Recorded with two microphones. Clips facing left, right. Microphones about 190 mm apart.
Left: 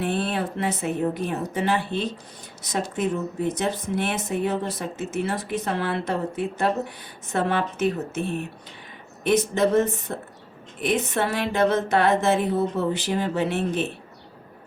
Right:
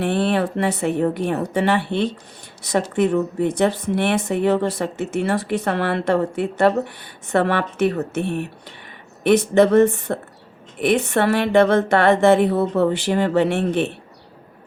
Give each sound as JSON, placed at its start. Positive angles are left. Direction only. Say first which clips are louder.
{"t": 0.0, "sound": "speech", "louder": "right 6 dB", "side_deg": -70}